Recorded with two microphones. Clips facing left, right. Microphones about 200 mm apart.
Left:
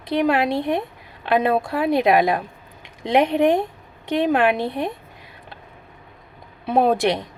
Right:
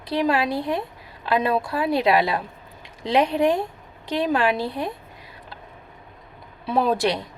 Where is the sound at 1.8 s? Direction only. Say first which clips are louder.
Left 3 dB; 20° left (ahead or behind).